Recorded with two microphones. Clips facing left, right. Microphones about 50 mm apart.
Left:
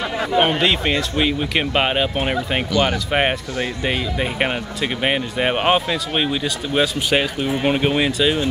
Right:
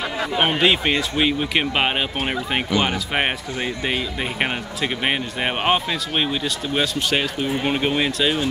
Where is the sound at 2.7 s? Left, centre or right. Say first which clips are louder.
Left 3 dB; centre.